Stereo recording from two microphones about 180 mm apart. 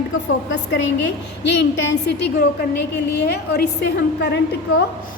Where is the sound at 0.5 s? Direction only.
80° left.